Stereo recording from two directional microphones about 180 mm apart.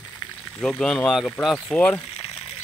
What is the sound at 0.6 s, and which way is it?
Speech, 5° left (ahead or behind).